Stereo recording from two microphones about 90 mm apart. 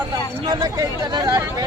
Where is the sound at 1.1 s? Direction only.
50° right (ahead or behind).